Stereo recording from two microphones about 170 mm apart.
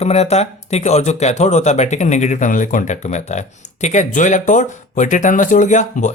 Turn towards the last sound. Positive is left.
turn(degrees=45)  # may be behind; listen again after turning